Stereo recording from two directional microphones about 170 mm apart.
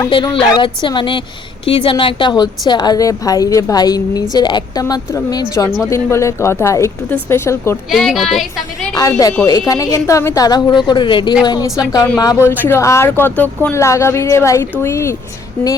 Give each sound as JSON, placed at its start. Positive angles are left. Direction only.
{"t": 0.5, "sound": "a woman's voice", "side_deg": 25}
{"t": 7.9, "sound": "a woman's voice", "side_deg": 0}
{"t": 9.0, "sound": "a woman's voice", "side_deg": 20}